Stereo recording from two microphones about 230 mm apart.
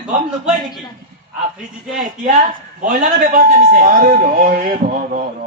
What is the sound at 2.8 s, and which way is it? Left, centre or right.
A man's voice, right.